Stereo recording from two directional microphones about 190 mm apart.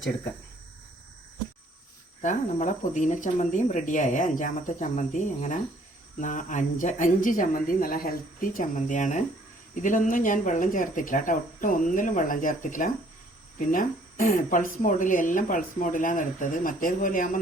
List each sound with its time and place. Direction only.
2.2 s speech: 40° left (ahead or behind)